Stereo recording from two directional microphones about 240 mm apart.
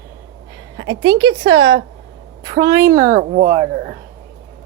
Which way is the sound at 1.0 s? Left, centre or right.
Centre.